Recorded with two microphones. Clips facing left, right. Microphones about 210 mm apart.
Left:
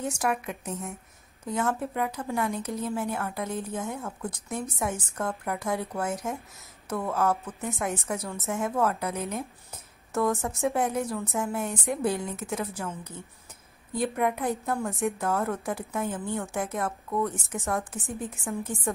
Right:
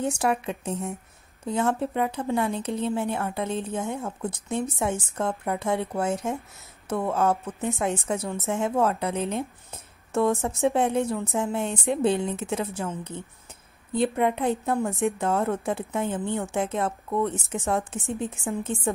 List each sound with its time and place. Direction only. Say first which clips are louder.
0.0 s a woman's voice: right 4 dB; 30° right (ahead or behind)